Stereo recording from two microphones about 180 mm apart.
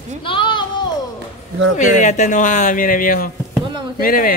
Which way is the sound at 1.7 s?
40° left (ahead or behind).